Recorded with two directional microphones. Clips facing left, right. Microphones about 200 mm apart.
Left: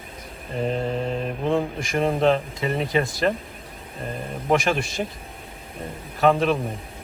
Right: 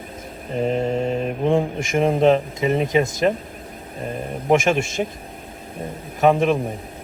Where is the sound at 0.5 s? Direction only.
20° right (ahead or behind).